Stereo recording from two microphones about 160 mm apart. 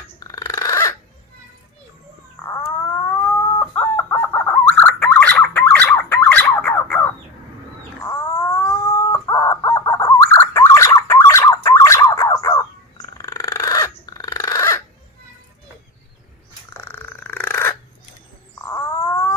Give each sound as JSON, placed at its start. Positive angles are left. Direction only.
{"t": 0.2, "sound": "a sound", "side_deg": 20}
{"t": 2.4, "sound": "chicken", "side_deg": 15}
{"t": 8.1, "sound": "dog", "side_deg": 20}
{"t": 9.1, "sound": "chicken", "side_deg": 20}
{"t": 13.2, "sound": "dog", "side_deg": 20}
{"t": 16.7, "sound": "dog", "side_deg": 15}
{"t": 18.7, "sound": "wail", "side_deg": 20}